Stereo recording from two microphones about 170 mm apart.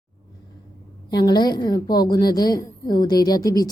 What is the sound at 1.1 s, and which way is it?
A woman's voice, 25° left (ahead or behind).